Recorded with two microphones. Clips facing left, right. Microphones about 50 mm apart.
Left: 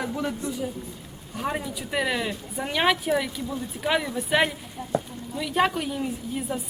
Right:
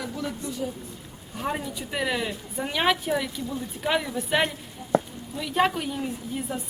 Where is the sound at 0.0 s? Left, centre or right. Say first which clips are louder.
Left 3 dB; left.